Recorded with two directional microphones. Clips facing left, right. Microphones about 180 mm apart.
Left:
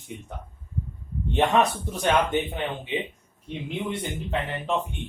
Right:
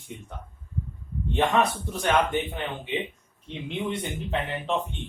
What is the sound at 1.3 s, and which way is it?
Speech, 20° left (ahead or behind).